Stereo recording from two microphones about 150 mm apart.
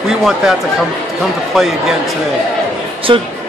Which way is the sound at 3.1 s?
35° right (ahead or behind).